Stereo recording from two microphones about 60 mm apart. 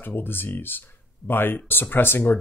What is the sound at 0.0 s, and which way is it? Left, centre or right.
Speech, left.